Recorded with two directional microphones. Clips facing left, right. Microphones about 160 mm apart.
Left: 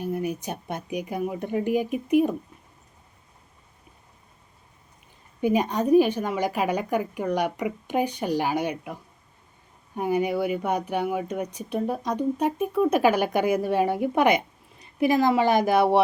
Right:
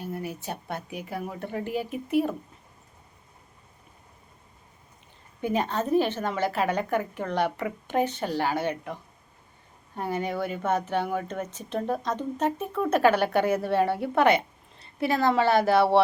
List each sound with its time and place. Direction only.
0.0 s speech: 20° left (ahead or behind)
5.4 s speech: 15° left (ahead or behind)